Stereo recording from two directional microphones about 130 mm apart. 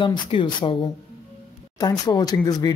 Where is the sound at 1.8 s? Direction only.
30° left (ahead or behind).